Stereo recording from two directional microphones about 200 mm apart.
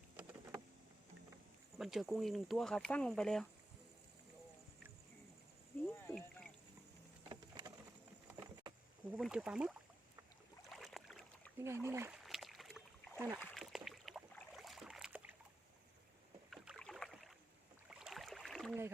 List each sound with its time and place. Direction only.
0.2 s a sound: 5° right (ahead or behind)
1.8 s speech: centre (ahead or behind)
7.3 s a sound: 20° right (ahead or behind)
9.0 s speech: 5° right (ahead or behind)
10.6 s boat: centre (ahead or behind)
11.6 s speech: 15° right (ahead or behind)
12.2 s a sound: centre (ahead or behind)
13.1 s speech: 10° right (ahead or behind)
13.4 s boat: centre (ahead or behind)
16.5 s rowboat: centre (ahead or behind)